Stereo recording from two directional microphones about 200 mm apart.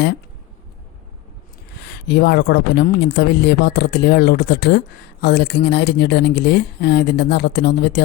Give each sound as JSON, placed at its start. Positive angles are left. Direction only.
{"t": 1.8, "sound": "speech", "side_deg": 55}